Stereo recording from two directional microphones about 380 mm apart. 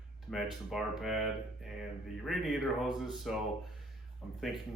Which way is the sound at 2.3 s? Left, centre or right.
Centre.